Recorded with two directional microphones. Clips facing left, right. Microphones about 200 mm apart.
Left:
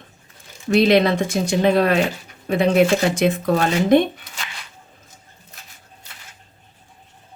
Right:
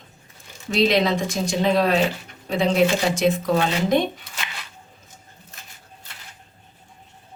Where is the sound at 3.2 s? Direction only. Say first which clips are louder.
Left 2 dB; 55° left (ahead or behind).